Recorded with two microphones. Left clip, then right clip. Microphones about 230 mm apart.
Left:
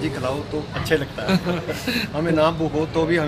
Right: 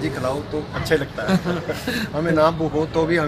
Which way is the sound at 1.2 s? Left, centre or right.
Centre.